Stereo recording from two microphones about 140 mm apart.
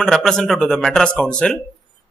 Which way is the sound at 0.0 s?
5° left (ahead or behind).